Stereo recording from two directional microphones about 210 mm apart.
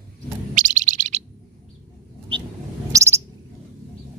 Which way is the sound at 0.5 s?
35° right (ahead or behind).